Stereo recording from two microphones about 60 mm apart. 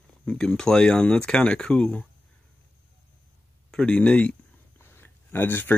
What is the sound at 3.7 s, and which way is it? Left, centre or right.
Speech, centre.